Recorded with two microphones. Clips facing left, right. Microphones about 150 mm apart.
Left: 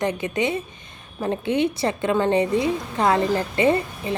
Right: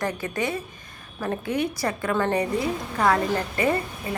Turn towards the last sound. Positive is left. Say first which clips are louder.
# left 4 dB
turn(degrees=25)  # may be behind; listen again after turning